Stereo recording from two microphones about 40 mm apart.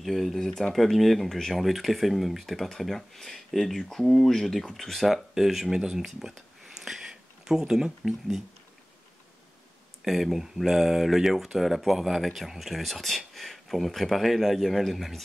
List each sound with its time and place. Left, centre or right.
0.0 s speech: centre
6.8 s a sound: centre
10.0 s speech: centre